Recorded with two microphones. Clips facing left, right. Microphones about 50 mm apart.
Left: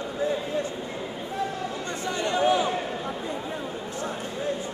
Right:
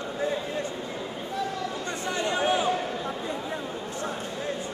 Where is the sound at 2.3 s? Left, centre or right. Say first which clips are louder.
Left 3 dB; right.